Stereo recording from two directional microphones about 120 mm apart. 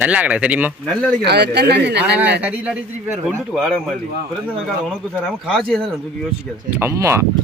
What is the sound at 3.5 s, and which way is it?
Speech, 5° left (ahead or behind).